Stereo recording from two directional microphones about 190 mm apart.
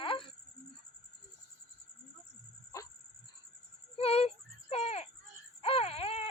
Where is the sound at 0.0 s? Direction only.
25° left (ahead or behind).